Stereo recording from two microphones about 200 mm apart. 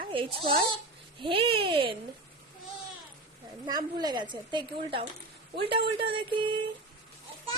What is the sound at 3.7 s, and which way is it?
A woman's voice, 20° right (ahead or behind).